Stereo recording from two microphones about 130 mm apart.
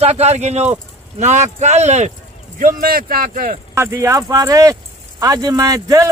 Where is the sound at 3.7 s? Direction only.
20° right (ahead or behind).